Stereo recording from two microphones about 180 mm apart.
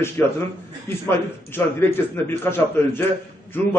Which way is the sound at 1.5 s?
10° left (ahead or behind).